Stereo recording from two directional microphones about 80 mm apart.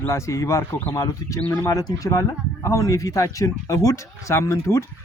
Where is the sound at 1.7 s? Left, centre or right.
Left.